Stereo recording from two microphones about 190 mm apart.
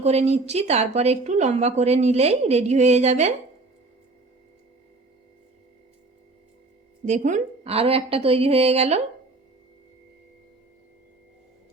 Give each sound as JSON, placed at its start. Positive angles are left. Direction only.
{"t": 0.0, "sound": "a woman's voice", "side_deg": -35}
{"t": 7.2, "sound": "a woman's voice", "side_deg": -40}